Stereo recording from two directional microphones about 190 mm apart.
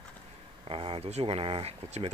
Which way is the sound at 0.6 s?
30° right (ahead or behind).